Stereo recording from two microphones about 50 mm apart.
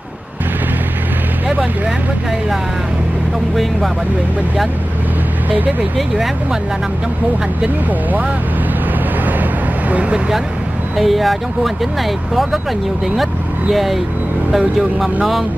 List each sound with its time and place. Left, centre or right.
9.4 s vehicle: right
11.0 s speech: centre
13.1 s speech: centre